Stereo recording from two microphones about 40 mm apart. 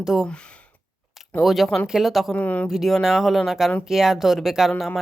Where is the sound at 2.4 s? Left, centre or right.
Left.